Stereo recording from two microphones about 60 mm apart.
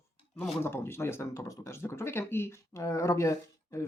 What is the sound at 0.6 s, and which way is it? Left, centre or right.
Speech, left.